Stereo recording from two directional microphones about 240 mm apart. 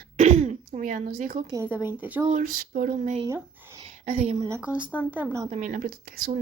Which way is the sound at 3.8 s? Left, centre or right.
Right.